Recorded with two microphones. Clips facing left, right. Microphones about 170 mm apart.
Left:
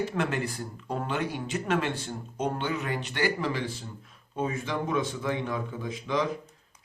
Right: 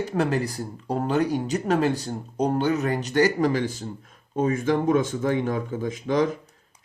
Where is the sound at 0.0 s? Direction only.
40° right (ahead or behind).